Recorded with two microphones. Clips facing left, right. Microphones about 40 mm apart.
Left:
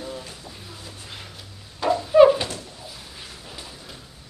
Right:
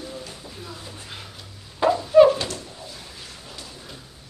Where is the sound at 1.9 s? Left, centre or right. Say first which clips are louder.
Even; centre.